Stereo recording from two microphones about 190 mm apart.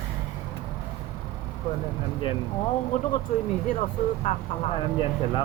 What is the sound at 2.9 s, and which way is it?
Speech, 40° left (ahead or behind).